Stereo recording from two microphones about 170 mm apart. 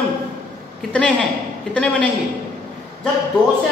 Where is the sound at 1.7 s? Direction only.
5° left (ahead or behind).